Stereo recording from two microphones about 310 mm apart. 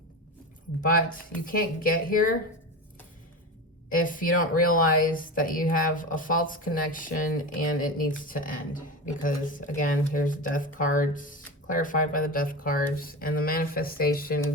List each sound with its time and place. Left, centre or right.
0.8 s speech: left
3.8 s speech: left